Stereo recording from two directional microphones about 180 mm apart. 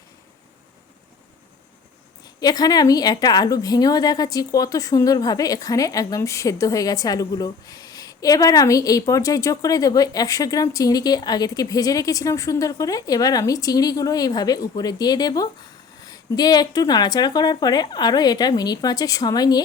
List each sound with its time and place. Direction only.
2.2 s a woman's voice: 20° left (ahead or behind)